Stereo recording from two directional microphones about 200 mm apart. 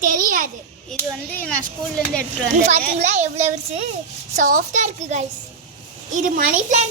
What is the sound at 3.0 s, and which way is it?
A child's voice, 35° right (ahead or behind).